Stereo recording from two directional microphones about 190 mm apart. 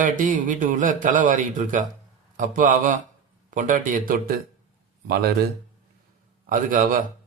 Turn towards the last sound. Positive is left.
turn(degrees=-45)  # may be behind; listen again after turning